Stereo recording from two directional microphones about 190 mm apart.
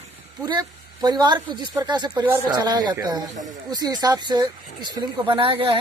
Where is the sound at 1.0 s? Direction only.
20° right (ahead or behind).